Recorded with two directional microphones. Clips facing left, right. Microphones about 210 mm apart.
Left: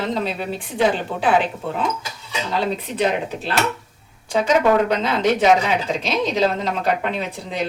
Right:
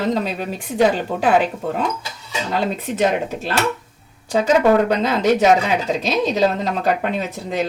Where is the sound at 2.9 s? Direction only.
45° right (ahead or behind).